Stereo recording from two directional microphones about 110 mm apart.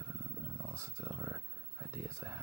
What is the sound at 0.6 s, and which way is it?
Speech, 25° right (ahead or behind).